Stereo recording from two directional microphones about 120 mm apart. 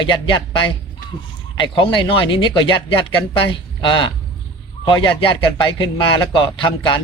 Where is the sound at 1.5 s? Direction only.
40° left (ahead or behind).